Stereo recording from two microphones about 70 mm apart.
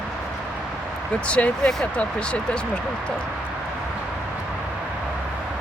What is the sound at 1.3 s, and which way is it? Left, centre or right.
Speech, centre.